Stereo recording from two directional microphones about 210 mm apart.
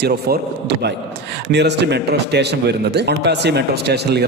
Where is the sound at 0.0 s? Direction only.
50° right (ahead or behind).